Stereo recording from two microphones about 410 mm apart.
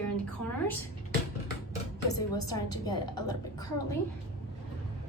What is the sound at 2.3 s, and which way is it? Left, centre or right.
Speech, left.